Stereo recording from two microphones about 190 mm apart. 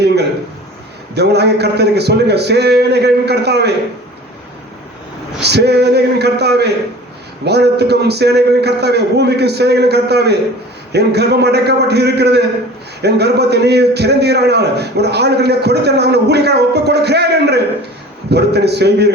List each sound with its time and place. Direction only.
1.1 s a man's voice: 60° right (ahead or behind)
5.4 s a man's voice: 60° right (ahead or behind)